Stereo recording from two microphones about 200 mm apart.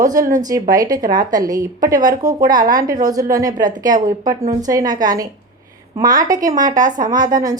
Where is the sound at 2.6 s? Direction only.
45° right (ahead or behind).